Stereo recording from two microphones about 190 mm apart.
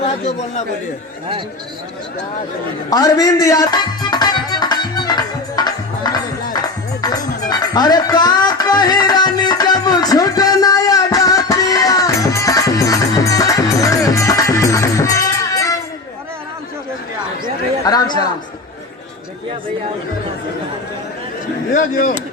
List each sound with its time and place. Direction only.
2.9 s music: 20° left (ahead or behind)
17.8 s a sound: 20° left (ahead or behind)
21.7 s speech: 45° left (ahead or behind)